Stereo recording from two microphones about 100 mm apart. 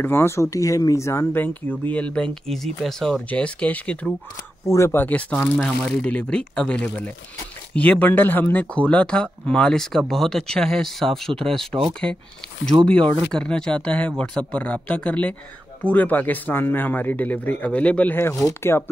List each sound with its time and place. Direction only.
0.0 s speech: 25° left (ahead or behind)
4.7 s speech: 25° left (ahead or behind)
12.7 s speech: 60° right (ahead or behind)
13.3 s speech: 10° left (ahead or behind); by 18.9 s 25° left (ahead or behind)